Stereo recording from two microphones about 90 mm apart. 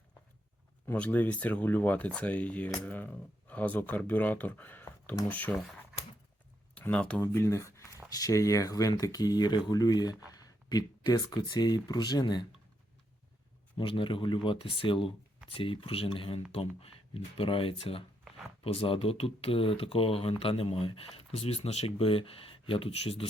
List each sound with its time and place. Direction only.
0.9 s speech: 15° left (ahead or behind)
6.7 s speech: 15° left (ahead or behind)
7.3 s speech: 30° left (ahead or behind); by 12.5 s 55° left (ahead or behind)
13.7 s speech: 70° left (ahead or behind); by 23.3 s 90° left